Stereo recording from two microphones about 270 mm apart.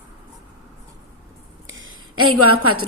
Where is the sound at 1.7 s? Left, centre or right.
Right.